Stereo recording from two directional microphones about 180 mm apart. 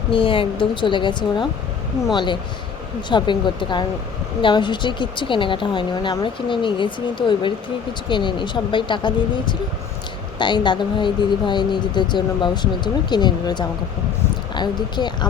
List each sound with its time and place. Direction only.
0.1 s speech: 30° left (ahead or behind)